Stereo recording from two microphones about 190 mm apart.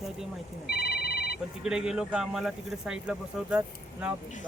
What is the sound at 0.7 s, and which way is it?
Telephone, 55° left (ahead or behind).